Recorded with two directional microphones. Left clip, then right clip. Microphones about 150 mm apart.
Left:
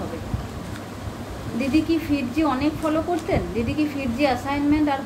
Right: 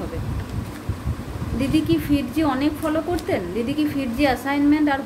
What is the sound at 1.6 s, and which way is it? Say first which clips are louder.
A woman's voice: right 1 dB; 15° right (ahead or behind).